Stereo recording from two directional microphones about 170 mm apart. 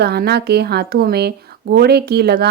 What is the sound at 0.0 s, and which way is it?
Speech, 70° right (ahead or behind).